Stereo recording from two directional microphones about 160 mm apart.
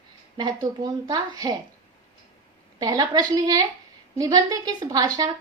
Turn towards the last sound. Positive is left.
turn(degrees=-20)  # may be behind; listen again after turning